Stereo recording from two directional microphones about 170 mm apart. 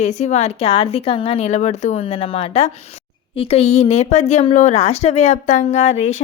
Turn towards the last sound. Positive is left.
turn(degrees=40)  # may be behind; listen again after turning